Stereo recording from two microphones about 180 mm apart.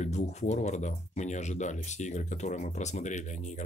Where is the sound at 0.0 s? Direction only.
40° left (ahead or behind).